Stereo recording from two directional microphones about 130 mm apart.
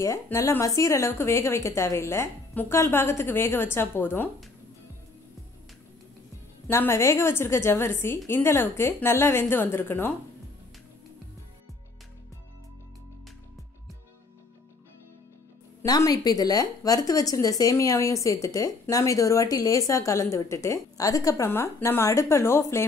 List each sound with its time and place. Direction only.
0.0 s a woman's voice: 25° left (ahead or behind)
6.7 s a woman's voice: 20° left (ahead or behind)
15.8 s a woman's voice: 30° left (ahead or behind)